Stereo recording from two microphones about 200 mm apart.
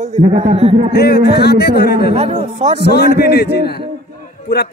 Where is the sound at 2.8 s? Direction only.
55° left (ahead or behind).